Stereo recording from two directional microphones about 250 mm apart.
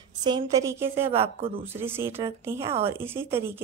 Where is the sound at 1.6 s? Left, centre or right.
Centre.